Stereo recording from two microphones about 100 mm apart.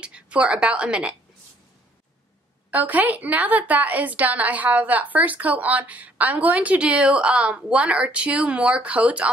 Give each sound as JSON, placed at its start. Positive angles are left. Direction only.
{"t": 0.0, "sound": "a woman's voice", "side_deg": -10}
{"t": 2.7, "sound": "a woman's voice", "side_deg": -15}